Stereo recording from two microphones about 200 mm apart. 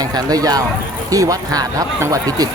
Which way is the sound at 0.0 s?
20° right (ahead or behind).